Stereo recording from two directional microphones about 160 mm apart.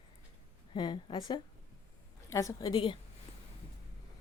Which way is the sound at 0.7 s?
30° left (ahead or behind).